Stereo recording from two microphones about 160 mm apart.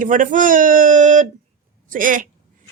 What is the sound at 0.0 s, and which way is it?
Speech, 50° right (ahead or behind).